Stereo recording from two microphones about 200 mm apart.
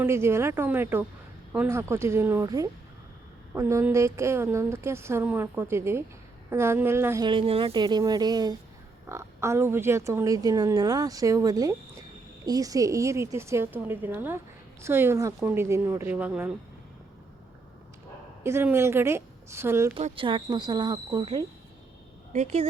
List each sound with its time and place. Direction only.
0.0 s a woman's voice: 10° right (ahead or behind)
7.3 s a woman's voice: 25° right (ahead or behind); by 16.6 s 5° right (ahead or behind)
18.4 s a woman's voice: 10° right (ahead or behind)
19.9 s speech: 30° right (ahead or behind)
22.3 s speech: 35° right (ahead or behind)